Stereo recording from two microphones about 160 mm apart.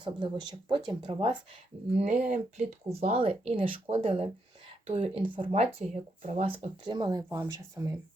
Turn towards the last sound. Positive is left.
turn(degrees=-20)  # may be behind; listen again after turning